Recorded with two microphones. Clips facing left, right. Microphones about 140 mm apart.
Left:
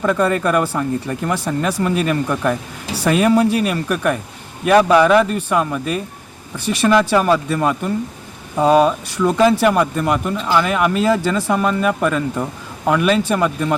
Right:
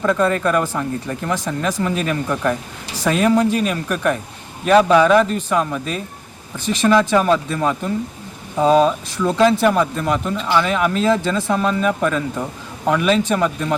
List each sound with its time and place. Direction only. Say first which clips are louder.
0.0 s speech: left 1 dB; 10° left (ahead or behind)